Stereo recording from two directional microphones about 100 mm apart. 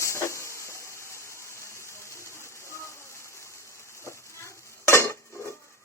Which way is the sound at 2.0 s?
30° left (ahead or behind).